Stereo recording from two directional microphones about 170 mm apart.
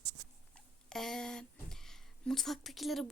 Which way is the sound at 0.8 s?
5° left (ahead or behind).